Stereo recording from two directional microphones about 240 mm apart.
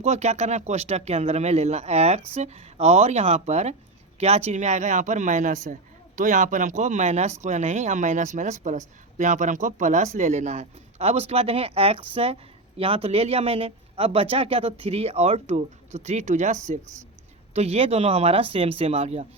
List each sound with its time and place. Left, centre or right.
0.0 s speech: right